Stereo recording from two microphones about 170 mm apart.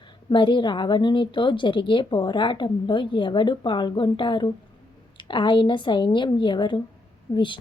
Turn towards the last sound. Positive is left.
turn(degrees=30)  # may be behind; listen again after turning